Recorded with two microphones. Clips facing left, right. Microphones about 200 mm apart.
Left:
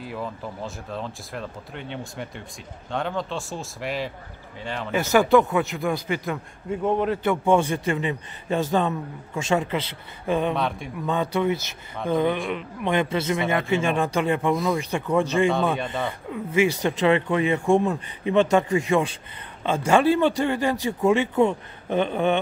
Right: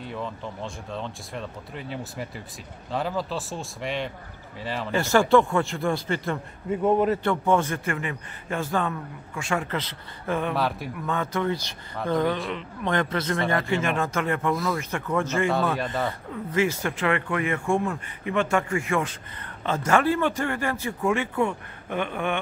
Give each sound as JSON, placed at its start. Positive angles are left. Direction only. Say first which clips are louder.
{"t": 0.0, "sound": "speech", "louder": "left 1 dB", "side_deg": 5}
{"t": 7.4, "sound": "speech", "louder": "left 5 dB", "side_deg": 15}
{"t": 10.5, "sound": "speech", "louder": "even", "side_deg": -5}
{"t": 11.1, "sound": "a man's voice", "louder": "left 3 dB", "side_deg": 15}
{"t": 15.5, "sound": "speech", "louder": "left 1 dB", "side_deg": 0}
{"t": 16.1, "sound": "speech", "louder": "left 2 dB", "side_deg": 15}